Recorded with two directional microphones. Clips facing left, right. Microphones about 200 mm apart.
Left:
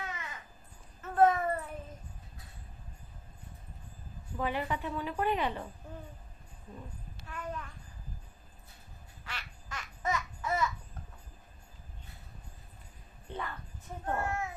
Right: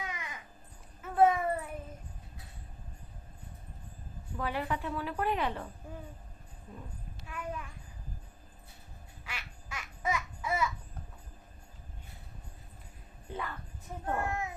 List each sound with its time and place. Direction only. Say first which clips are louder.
0.0 s crow: even; 15° right (ahead or behind)
1.0 s a sound: even; 10° right (ahead or behind)
4.4 s a woman's voice: left 1 dB; centre (ahead or behind)
7.3 s a sound: even; 10° right (ahead or behind)
9.2 s babbling: even; 10° right (ahead or behind)
13.3 s music: even; 5° right (ahead or behind)